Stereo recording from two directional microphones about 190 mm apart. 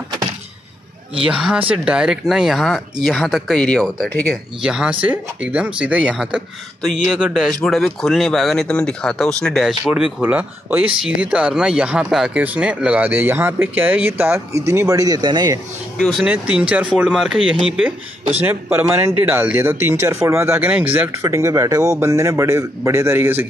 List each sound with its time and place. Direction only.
1.2 s speech: 5° right (ahead or behind); by 15.6 s 20° right (ahead or behind)
16.0 s speech: centre (ahead or behind)